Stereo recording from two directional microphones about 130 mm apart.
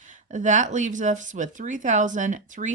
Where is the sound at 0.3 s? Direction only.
70° right (ahead or behind).